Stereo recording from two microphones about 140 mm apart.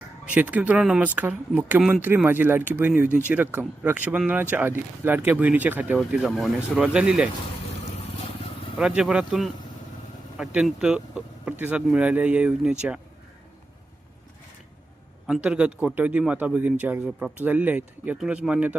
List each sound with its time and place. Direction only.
0.3 s speech: 10° right (ahead or behind)
8.8 s speech: 10° right (ahead or behind)
15.3 s speech: 10° right (ahead or behind)